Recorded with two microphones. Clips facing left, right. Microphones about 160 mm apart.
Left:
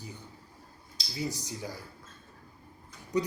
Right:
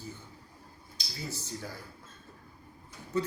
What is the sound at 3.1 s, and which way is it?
Speech, 15° left (ahead or behind).